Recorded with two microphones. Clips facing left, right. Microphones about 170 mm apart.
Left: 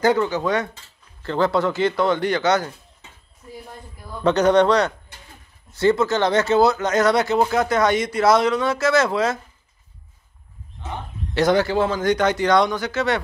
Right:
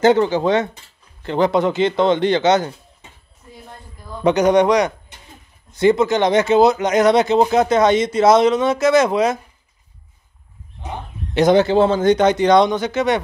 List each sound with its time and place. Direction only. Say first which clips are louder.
0.0 s speech: right 5 dB; 25° right (ahead or behind)
4.2 s a man's voice: right 2 dB; 15° right (ahead or behind)
10.8 s bird: right 2 dB; 15° right (ahead or behind)
11.3 s speech: right 5 dB; 20° right (ahead or behind)